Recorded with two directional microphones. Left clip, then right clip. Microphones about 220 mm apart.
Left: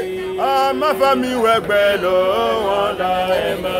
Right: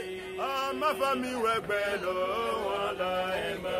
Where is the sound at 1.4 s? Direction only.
20° left (ahead or behind).